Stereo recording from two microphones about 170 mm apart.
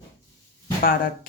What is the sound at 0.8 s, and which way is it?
Speech, 55° left (ahead or behind).